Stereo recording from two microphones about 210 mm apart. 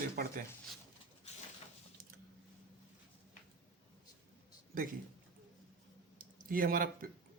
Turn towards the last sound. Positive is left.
turn(degrees=-45)  # may be behind; listen again after turning